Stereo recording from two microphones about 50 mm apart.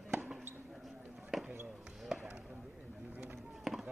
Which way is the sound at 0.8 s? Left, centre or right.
Centre.